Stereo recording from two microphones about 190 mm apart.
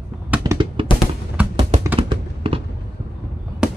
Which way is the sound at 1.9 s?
30° right (ahead or behind).